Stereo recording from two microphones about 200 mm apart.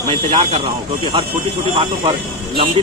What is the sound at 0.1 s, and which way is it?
A man's voice, 30° right (ahead or behind).